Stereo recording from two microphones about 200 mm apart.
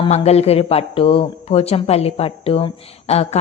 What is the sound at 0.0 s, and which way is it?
A woman's voice, 30° left (ahead or behind).